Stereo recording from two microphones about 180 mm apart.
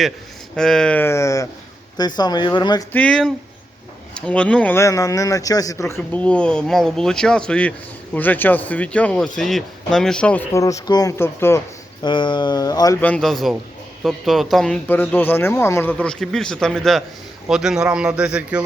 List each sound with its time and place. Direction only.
0.5 s a man's voice: 5° left (ahead or behind); by 2.8 s 25° left (ahead or behind)
2.9 s a man's voice: 5° left (ahead or behind)
12.0 s speech: 25° left (ahead or behind)
13.0 s speech: 5° left (ahead or behind)